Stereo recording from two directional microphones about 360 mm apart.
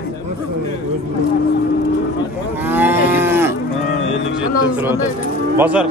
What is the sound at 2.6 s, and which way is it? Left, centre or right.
Moo, centre.